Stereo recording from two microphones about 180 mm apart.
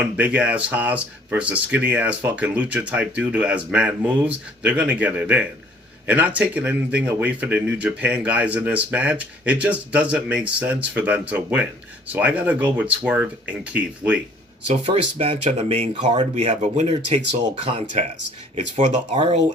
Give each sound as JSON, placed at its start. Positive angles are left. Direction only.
{"t": 0.0, "sound": "speech", "side_deg": -5}
{"t": 14.7, "sound": "speech", "side_deg": -35}